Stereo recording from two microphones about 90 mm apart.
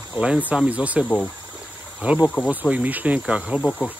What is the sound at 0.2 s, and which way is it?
Speech, 15° right (ahead or behind).